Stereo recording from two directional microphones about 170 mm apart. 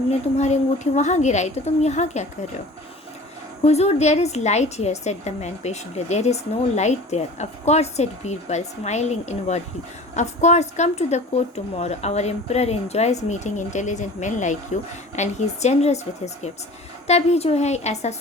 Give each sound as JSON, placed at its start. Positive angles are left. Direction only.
{"t": 0.3, "sound": "a woman's voice", "side_deg": 40}
{"t": 3.6, "sound": "a woman's voice", "side_deg": 40}